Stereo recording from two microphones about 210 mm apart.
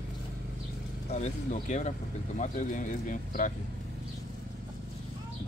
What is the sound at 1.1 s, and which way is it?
Speech, 35° left (ahead or behind).